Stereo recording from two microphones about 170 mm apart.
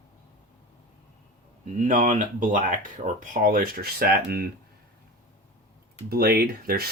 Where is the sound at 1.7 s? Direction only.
50° right (ahead or behind).